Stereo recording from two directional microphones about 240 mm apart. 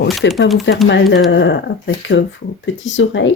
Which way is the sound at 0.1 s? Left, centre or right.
Centre.